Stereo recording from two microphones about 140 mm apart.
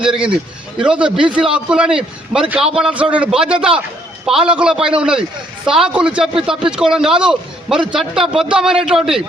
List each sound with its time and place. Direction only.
0.8 s a man's voice: 5° right (ahead or behind)